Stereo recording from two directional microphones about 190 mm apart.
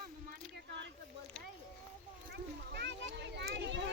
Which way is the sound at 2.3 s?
60° right (ahead or behind).